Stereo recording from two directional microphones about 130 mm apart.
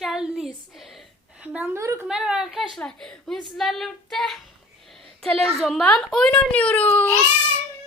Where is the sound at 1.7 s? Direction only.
20° right (ahead or behind).